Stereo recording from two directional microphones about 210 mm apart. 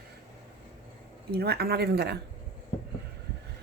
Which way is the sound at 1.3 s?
50° right (ahead or behind).